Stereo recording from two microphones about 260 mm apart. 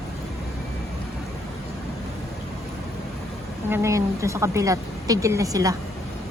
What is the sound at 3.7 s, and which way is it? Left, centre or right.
A woman's voice, centre.